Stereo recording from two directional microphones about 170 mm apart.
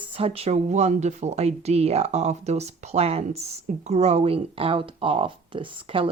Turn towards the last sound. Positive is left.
turn(degrees=-30)  # may be behind; listen again after turning